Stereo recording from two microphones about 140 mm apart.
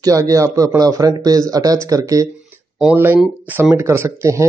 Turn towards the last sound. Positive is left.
turn(degrees=-20)  # may be behind; listen again after turning